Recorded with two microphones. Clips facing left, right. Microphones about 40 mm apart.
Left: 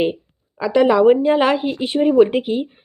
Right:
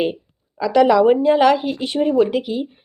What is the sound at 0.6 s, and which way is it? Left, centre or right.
Speech, left.